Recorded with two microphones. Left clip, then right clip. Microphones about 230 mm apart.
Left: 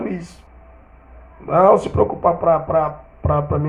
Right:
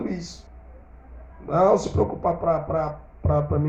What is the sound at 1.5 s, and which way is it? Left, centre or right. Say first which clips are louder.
Speech: left 6 dB; left.